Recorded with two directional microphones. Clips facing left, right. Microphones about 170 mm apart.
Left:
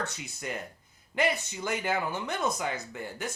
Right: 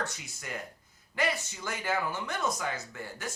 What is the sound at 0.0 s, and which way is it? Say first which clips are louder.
Speech: left 2 dB; 20° left (ahead or behind).